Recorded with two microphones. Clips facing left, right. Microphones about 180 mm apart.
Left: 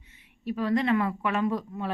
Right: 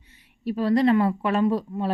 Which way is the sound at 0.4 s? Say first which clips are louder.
Right 5 dB; 35° right (ahead or behind).